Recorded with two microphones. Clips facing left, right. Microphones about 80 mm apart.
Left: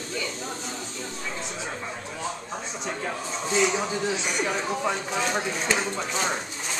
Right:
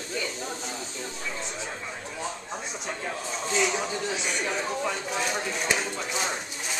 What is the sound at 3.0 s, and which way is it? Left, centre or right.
Speech, centre.